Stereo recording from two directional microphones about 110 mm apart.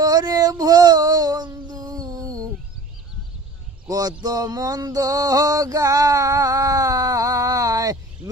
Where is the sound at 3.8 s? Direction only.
35° right (ahead or behind).